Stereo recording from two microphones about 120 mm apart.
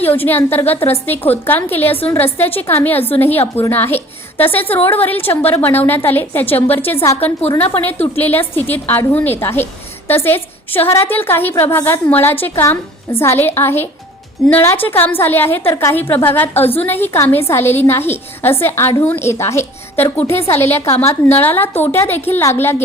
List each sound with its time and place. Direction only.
0.0 s a woman's voice: 15° left (ahead or behind)
20.9 s a woman's voice: 60° left (ahead or behind)
21.2 s a woman's voice: 20° left (ahead or behind)